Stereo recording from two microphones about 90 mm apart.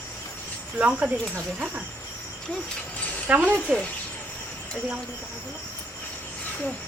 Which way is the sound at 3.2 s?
20° right (ahead or behind).